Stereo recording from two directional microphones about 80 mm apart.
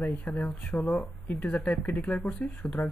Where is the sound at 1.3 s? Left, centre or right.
Centre.